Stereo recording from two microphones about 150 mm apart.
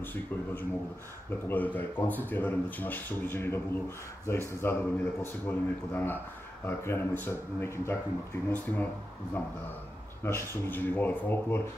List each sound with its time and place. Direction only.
0.0 s speech: 15° left (ahead or behind)
10.2 s speech: 15° left (ahead or behind)